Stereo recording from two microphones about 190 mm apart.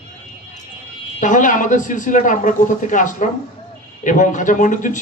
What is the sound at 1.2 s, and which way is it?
A man's voice, 40° left (ahead or behind).